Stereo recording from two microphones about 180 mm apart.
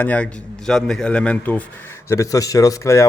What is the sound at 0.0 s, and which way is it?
Speech, 5° left (ahead or behind).